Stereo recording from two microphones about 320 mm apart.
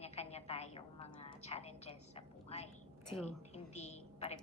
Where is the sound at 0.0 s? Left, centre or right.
Centre.